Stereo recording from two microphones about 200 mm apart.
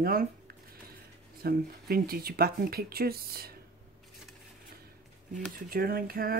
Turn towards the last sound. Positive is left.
turn(degrees=-45)  # may be behind; listen again after turning